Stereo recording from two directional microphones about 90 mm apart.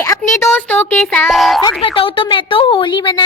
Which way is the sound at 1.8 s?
80° left.